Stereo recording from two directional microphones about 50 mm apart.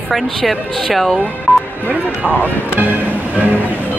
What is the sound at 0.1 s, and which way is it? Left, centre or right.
Speech, centre.